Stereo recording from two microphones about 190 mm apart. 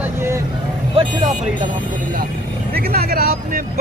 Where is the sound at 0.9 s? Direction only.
30° right (ahead or behind).